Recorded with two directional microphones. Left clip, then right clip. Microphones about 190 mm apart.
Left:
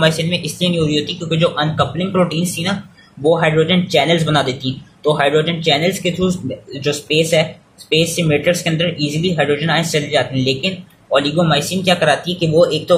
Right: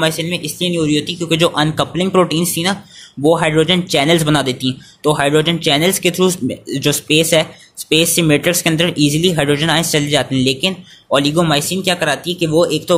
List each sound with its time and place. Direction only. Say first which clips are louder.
0.0 s speech: left 1 dB; 30° right (ahead or behind)